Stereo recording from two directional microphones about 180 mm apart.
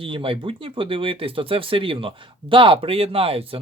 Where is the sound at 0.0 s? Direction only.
30° right (ahead or behind).